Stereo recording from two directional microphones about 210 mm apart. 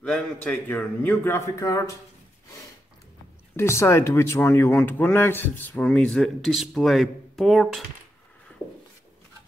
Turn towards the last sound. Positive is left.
turn(degrees=0)  # may be behind; listen again after turning